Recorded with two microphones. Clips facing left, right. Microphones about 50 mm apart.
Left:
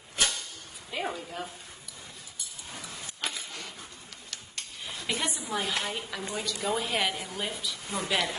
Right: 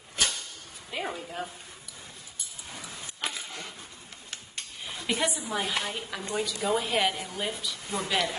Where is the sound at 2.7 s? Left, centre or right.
Right.